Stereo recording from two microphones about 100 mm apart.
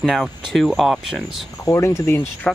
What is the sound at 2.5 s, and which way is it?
Speech, 5° left (ahead or behind).